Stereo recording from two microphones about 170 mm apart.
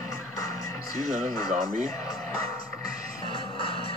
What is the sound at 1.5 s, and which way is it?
Speech, 45° right (ahead or behind).